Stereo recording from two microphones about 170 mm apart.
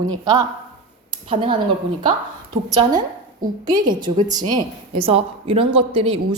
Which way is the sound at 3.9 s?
25° right (ahead or behind).